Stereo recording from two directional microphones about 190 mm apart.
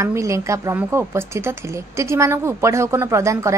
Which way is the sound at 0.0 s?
15° right (ahead or behind).